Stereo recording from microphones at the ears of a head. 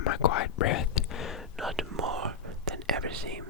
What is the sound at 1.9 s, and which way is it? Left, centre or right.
Whispering, right.